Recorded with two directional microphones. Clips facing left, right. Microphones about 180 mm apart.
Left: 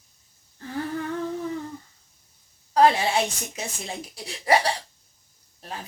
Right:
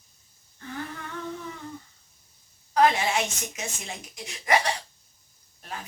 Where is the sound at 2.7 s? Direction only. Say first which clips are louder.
Left 3 dB; 30° left (ahead or behind).